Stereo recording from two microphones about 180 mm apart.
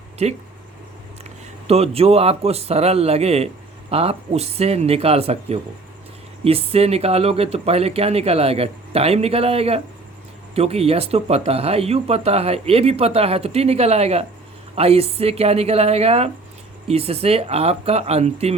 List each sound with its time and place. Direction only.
0.2 s speech: 35° right (ahead or behind)
1.6 s speech: 35° right (ahead or behind)